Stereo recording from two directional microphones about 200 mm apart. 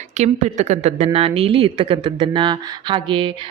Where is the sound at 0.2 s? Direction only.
35° right (ahead or behind).